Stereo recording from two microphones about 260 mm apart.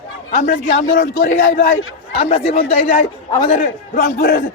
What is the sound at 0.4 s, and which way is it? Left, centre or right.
Speech, left.